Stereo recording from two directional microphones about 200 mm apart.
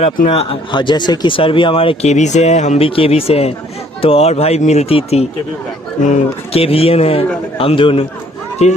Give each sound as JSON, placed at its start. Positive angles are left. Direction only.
{"t": 0.0, "sound": "speech", "side_deg": 30}